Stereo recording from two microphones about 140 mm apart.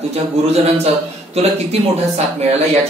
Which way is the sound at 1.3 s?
50° right (ahead or behind).